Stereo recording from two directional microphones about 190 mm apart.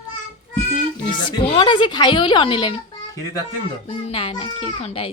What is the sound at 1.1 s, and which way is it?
A woman's voice, 25° left (ahead or behind).